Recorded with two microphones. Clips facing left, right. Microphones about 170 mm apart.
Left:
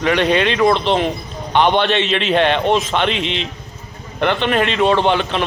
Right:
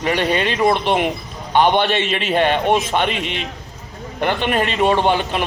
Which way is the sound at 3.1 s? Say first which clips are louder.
Left 3 dB; 50° right (ahead or behind).